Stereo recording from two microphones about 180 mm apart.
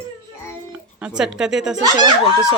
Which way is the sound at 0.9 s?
5° right (ahead or behind).